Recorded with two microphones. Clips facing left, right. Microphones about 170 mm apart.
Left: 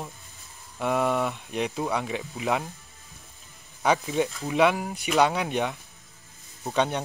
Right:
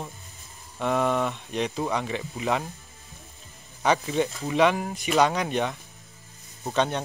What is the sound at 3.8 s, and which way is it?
Speech, 5° left (ahead or behind).